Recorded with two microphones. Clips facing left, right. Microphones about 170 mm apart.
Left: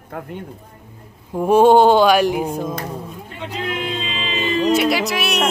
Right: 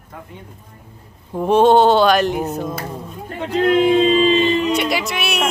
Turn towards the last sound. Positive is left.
turn(degrees=0)  # may be behind; listen again after turning